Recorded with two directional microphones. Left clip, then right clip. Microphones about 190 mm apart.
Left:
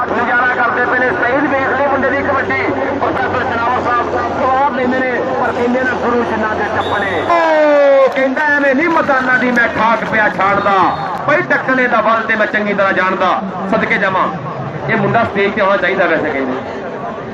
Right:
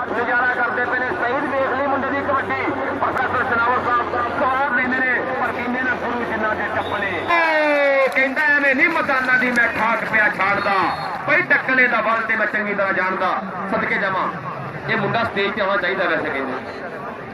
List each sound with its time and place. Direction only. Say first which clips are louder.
0.2 s chatter: left 5 dB; 45° right (ahead or behind)
7.3 s a man's voice: left 6 dB; 5° left (ahead or behind); by 16.2 s 20° right (ahead or behind)